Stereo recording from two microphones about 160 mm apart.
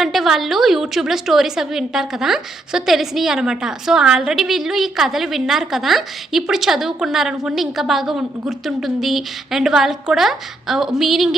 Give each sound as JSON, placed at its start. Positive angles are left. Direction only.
{"t": 0.0, "sound": "a woman's voice", "side_deg": 0}